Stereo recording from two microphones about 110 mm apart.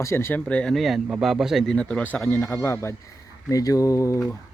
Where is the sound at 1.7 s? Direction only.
10° left (ahead or behind).